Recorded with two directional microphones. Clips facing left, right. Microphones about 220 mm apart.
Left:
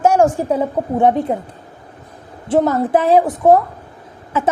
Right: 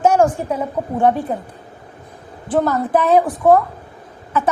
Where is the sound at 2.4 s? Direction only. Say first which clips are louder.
Left 3 dB; 25° left (ahead or behind).